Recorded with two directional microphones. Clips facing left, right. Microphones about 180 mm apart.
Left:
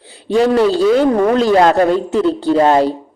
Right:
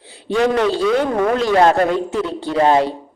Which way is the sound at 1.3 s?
35° left (ahead or behind).